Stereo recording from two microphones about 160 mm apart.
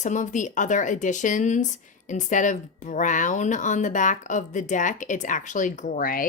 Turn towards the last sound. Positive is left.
turn(degrees=60)  # may be behind; listen again after turning